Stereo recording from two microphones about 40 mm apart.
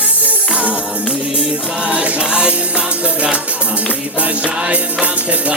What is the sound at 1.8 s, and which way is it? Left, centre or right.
Music, right.